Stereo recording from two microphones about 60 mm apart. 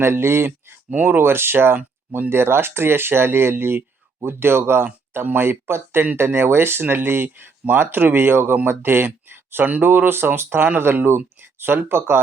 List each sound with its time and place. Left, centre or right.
0.0 s speech: right